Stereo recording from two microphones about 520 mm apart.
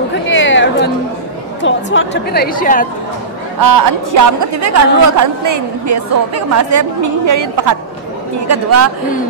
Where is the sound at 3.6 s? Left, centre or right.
Right.